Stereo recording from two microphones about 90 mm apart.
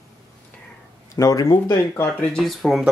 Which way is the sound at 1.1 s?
40° left (ahead or behind).